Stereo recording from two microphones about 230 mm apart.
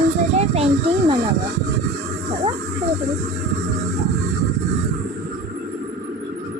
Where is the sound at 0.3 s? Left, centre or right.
Right.